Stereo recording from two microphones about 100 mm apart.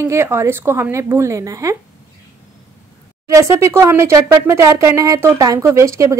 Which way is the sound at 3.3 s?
30° right (ahead or behind).